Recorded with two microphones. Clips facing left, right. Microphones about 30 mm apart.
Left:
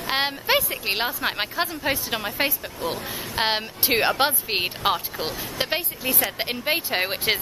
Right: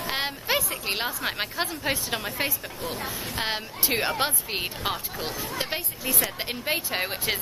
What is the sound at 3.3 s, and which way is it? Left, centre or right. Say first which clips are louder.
Speech: left 7 dB; left.